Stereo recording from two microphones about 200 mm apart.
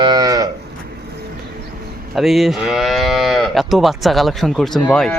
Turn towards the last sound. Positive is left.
turn(degrees=5)  # may be behind; listen again after turning